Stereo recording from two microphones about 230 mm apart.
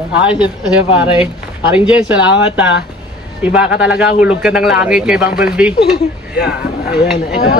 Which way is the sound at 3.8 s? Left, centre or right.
Centre.